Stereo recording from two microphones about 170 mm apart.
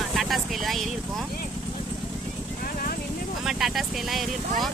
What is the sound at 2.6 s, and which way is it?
Vehicle, 55° left (ahead or behind).